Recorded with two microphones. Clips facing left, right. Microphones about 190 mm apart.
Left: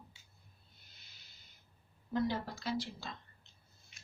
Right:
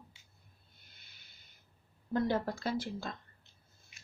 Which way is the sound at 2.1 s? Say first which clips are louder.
Right 3 dB; 55° right (ahead or behind).